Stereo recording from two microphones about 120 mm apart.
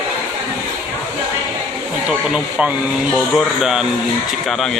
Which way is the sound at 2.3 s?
5° right (ahead or behind).